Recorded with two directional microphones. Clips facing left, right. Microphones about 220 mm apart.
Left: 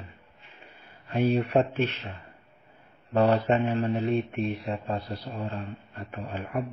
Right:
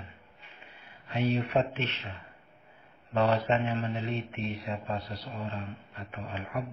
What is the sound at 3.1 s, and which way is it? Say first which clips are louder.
A man's voice: left 4 dB; 55° left (ahead or behind).